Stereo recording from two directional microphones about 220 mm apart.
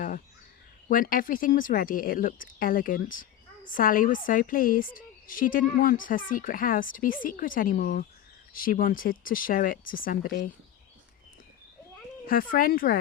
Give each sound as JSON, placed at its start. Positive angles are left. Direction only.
{"t": 0.9, "sound": "a woman's voice", "side_deg": 40}
{"t": 12.2, "sound": "a woman's voice", "side_deg": 40}